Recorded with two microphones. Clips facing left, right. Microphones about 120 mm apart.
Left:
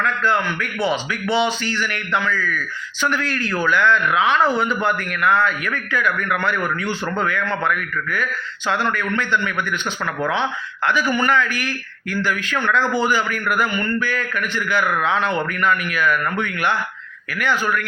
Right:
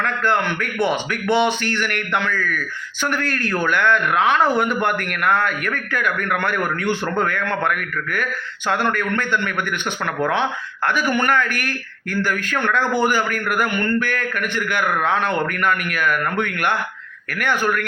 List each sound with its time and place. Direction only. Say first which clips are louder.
0.0 s a man's voice: even; 60° right (ahead or behind)
10.8 s a man's voice: even; 50° right (ahead or behind)